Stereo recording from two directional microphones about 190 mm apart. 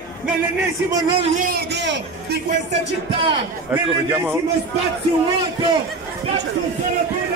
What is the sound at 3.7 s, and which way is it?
Speech, 10° right (ahead or behind).